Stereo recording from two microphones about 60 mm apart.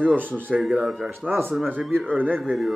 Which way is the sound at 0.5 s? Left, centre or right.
Centre.